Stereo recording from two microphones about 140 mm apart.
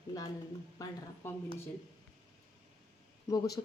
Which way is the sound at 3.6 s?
35° left (ahead or behind).